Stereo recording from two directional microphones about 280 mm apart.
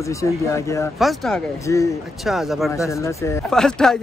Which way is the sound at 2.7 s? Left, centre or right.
Centre.